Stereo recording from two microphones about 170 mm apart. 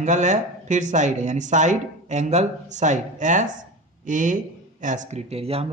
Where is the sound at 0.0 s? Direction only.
45° right (ahead or behind).